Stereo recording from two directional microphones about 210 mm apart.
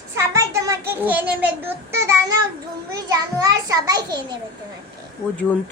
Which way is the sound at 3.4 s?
15° right (ahead or behind).